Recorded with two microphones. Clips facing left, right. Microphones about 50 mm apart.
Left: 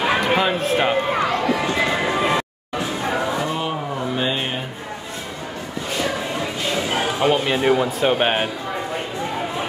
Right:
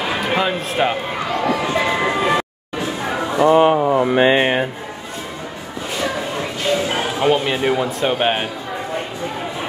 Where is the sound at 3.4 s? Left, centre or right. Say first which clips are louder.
Right 12 dB; right.